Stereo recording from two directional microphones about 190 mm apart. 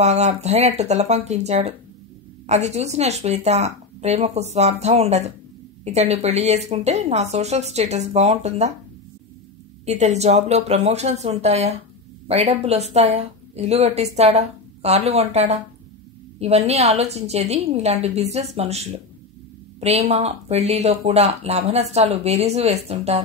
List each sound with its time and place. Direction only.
0.0 s a woman's voice: 35° right (ahead or behind)
9.8 s a woman's voice: 35° right (ahead or behind)